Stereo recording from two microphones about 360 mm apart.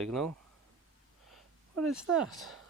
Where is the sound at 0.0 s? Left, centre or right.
Centre.